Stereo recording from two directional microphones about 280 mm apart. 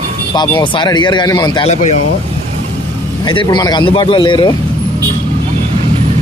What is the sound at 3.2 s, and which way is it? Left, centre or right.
Speech, centre.